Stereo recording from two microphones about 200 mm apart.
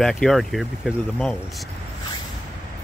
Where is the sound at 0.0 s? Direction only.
Centre (ahead or behind).